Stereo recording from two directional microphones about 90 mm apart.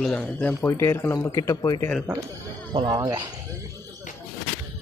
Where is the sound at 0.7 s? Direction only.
30° left (ahead or behind).